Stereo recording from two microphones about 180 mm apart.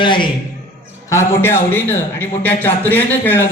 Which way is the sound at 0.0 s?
25° left (ahead or behind).